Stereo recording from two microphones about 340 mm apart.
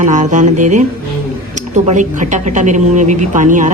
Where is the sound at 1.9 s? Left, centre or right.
Right.